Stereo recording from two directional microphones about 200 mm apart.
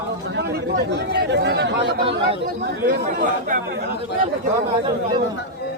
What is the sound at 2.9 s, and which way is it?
Speech, 45° right (ahead or behind).